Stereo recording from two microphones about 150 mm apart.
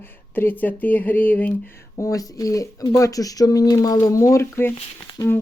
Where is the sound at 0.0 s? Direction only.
15° left (ahead or behind).